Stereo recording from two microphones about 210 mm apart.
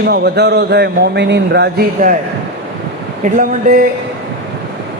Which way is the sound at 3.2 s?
40° right (ahead or behind).